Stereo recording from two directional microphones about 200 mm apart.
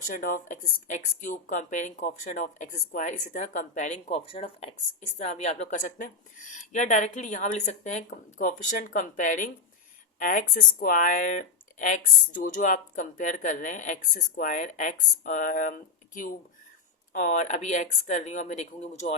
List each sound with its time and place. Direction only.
0.1 s speech: 40° left (ahead or behind)